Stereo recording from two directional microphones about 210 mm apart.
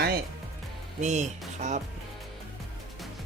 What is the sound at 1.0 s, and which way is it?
Speech, 35° right (ahead or behind).